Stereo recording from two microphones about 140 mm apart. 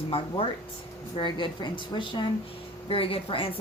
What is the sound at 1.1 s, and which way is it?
Speech, 35° left (ahead or behind).